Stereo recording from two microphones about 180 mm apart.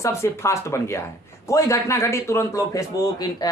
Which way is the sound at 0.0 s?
15° left (ahead or behind).